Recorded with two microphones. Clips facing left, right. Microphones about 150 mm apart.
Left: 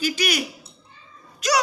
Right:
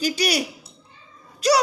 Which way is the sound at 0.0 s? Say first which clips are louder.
Right 2 dB; 35° right (ahead or behind).